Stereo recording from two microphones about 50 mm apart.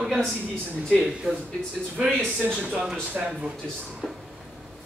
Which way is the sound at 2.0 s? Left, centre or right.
Centre.